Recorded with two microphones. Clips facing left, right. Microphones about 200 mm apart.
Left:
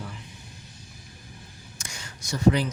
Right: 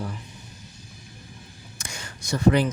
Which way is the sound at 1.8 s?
55° right (ahead or behind).